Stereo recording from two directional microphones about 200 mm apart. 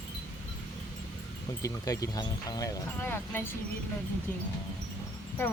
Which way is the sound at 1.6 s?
15° left (ahead or behind).